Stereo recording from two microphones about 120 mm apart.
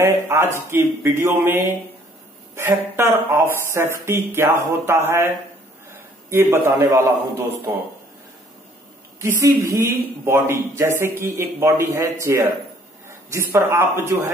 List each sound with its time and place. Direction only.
0.0 s speech: 20° right (ahead or behind)
6.3 s speech: 20° right (ahead or behind)
9.2 s speech: 25° right (ahead or behind)